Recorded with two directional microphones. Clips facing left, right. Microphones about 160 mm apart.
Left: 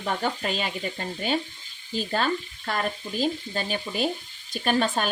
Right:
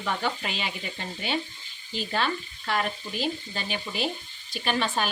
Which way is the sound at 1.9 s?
40° left (ahead or behind).